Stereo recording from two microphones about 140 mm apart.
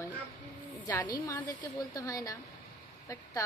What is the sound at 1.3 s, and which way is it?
Speech, 20° left (ahead or behind).